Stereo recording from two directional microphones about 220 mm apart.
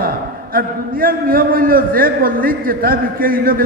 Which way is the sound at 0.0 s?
40° right (ahead or behind).